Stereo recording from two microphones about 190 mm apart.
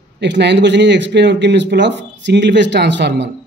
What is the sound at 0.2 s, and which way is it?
Speech, 65° right (ahead or behind).